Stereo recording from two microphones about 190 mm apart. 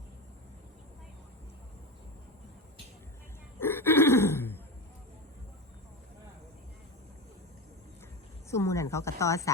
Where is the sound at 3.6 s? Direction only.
10° left (ahead or behind).